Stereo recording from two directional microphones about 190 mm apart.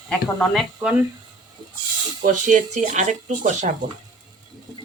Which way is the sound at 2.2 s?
40° right (ahead or behind).